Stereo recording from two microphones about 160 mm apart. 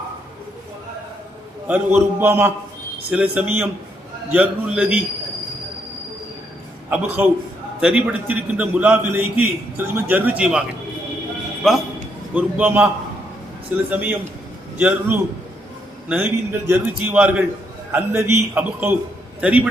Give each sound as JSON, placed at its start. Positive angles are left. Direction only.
{"t": 1.6, "sound": "a man's voice", "side_deg": -10}
{"t": 6.9, "sound": "a man's voice", "side_deg": -10}
{"t": 11.6, "sound": "a man's voice", "side_deg": 0}
{"t": 13.9, "sound": "a man's voice", "side_deg": -10}